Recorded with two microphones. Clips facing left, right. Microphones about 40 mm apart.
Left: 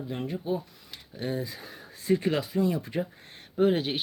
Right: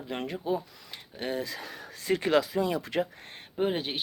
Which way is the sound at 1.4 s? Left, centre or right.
Right.